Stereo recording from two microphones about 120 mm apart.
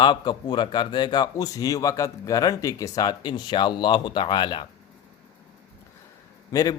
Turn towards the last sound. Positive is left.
turn(degrees=30)  # may be behind; listen again after turning